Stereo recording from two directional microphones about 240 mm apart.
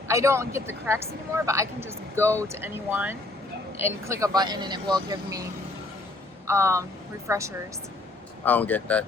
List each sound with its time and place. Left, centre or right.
0.1 s speech: centre
6.5 s speech: centre
8.4 s speech: centre